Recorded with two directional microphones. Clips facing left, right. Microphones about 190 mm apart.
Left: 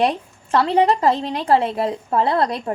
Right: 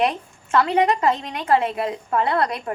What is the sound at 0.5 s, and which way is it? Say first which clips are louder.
A woman's voice: left 2 dB; 35° left (ahead or behind).